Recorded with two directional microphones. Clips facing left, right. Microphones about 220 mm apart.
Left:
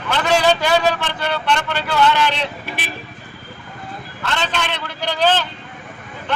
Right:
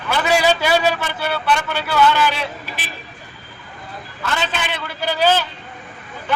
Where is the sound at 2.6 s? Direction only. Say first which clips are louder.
Left 4 dB; 60° left (ahead or behind).